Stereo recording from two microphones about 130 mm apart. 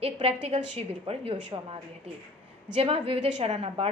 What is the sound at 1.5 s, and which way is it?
Speech, 35° right (ahead or behind).